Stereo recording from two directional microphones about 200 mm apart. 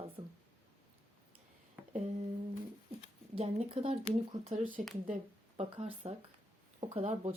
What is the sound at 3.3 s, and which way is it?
A woman's voice, 30° right (ahead or behind).